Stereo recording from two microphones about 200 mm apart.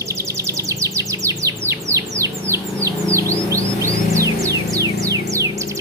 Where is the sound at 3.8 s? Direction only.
15° right (ahead or behind).